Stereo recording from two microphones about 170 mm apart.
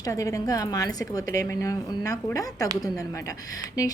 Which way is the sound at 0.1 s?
20° left (ahead or behind).